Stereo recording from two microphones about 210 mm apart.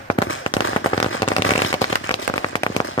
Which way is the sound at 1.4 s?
75° left (ahead or behind).